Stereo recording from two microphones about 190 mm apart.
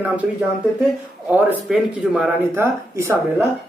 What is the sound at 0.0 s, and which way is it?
Speech, 10° right (ahead or behind).